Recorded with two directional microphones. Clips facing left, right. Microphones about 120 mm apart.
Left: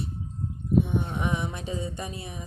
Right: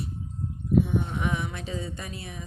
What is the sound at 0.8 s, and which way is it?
Speech, 20° left (ahead or behind).